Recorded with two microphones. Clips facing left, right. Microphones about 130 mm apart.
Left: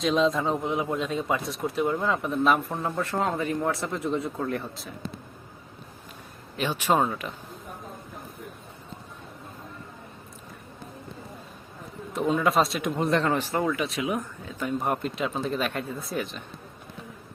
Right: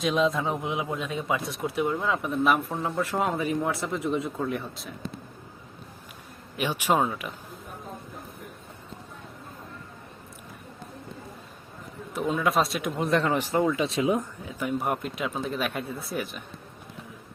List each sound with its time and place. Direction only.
0.0 s speech: centre (ahead or behind)
3.7 s speech: centre (ahead or behind)
6.6 s speech: 10° right (ahead or behind)
12.1 s speech: centre (ahead or behind)
13.3 s speech: 15° right (ahead or behind)
14.4 s speech: 10° right (ahead or behind)